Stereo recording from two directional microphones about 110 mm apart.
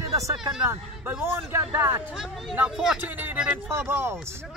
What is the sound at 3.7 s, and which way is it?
Speech, 20° right (ahead or behind).